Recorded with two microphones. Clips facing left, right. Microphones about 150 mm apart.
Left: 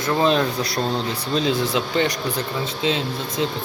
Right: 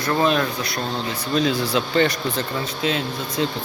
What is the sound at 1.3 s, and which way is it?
Speech, 20° left (ahead or behind).